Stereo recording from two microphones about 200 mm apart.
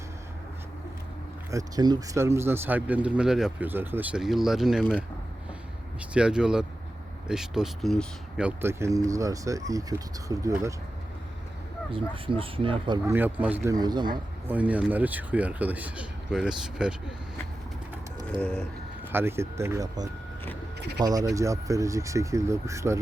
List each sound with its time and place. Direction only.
1.5 s speech: 15° right (ahead or behind)
6.1 s speech: 5° right (ahead or behind)
11.9 s speech: 25° right (ahead or behind)
13.1 s speech: 10° right (ahead or behind)
13.7 s speech: 20° right (ahead or behind)
14.4 s speech: 10° right (ahead or behind)
18.3 s bird: 5° left (ahead or behind)
19.1 s speech: 10° right (ahead or behind)